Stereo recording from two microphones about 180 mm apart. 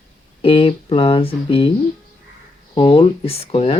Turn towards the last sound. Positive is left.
turn(degrees=35)  # may be behind; listen again after turning